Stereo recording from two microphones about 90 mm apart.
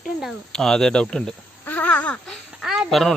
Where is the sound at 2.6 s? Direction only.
5° right (ahead or behind).